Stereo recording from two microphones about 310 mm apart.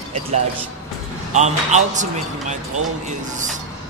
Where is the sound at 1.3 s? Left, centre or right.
Right.